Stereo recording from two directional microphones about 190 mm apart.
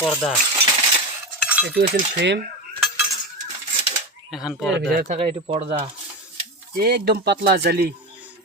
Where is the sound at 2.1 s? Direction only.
65° right (ahead or behind).